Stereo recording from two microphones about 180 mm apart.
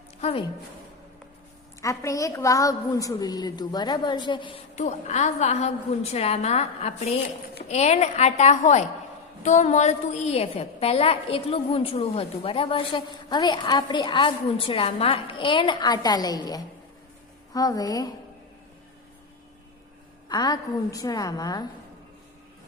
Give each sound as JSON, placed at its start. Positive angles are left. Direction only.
{"t": 0.2, "sound": "a woman's voice", "side_deg": 35}
{"t": 1.8, "sound": "a woman's voice", "side_deg": 15}
{"t": 4.7, "sound": "a woman's voice", "side_deg": 40}
{"t": 20.2, "sound": "a woman's voice", "side_deg": 25}